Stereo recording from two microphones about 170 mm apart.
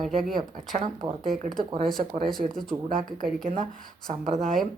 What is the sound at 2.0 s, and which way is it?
Speech, 45° right (ahead or behind).